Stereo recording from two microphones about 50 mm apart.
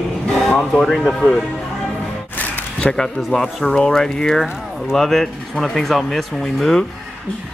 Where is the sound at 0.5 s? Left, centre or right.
Centre.